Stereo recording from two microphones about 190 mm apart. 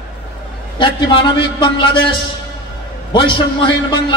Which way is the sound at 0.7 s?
25° left (ahead or behind).